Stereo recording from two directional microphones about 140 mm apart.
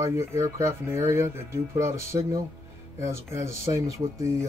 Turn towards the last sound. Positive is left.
turn(degrees=-20)  # may be behind; listen again after turning